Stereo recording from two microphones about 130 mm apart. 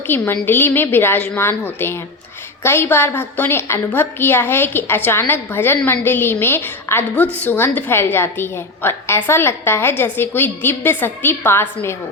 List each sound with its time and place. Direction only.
0.1 s a woman's voice: 15° left (ahead or behind)